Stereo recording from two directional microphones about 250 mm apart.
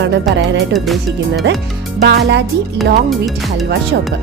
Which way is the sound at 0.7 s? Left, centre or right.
Centre.